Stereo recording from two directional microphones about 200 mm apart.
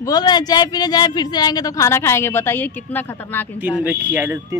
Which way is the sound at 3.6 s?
10° right (ahead or behind).